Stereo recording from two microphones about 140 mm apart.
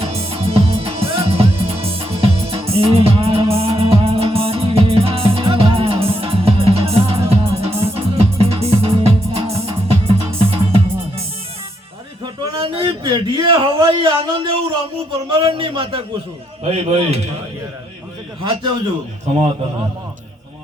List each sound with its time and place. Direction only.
0.0 s music: 45° right (ahead or behind)
12.2 s a sound: 35° right (ahead or behind)
15.3 s a man's voice: 35° right (ahead or behind)